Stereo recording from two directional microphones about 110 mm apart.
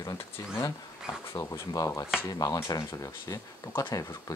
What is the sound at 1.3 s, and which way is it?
Speech, 30° left (ahead or behind).